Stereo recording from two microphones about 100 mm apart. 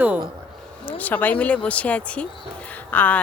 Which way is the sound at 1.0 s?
15° left (ahead or behind).